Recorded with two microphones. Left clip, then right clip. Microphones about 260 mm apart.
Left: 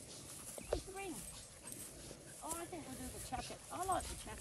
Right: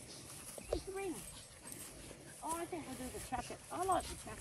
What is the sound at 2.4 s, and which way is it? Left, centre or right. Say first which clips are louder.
Speech: right 5 dB; centre.